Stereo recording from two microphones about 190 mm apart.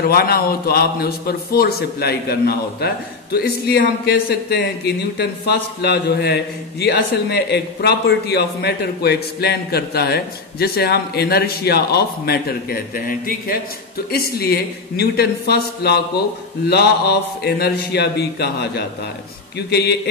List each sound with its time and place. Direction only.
0.0 s a man's voice: 55° left (ahead or behind)